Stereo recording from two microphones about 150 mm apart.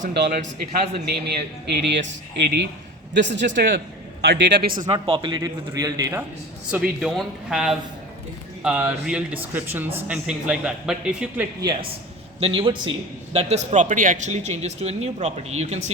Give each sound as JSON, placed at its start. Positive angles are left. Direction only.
{"t": 0.0, "sound": "a man's voice", "side_deg": -80}
{"t": 3.2, "sound": "a man's voice", "side_deg": -65}
{"t": 4.2, "sound": "a man's voice", "side_deg": -90}
{"t": 4.9, "sound": "speech", "side_deg": -35}
{"t": 6.7, "sound": "speech", "side_deg": -5}
{"t": 11.6, "sound": "a man's voice", "side_deg": -30}